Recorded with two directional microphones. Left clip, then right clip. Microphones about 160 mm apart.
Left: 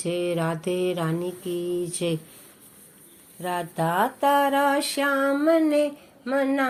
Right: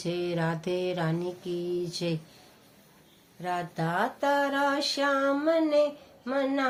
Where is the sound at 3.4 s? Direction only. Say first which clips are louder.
Left 5 dB; 10° left (ahead or behind).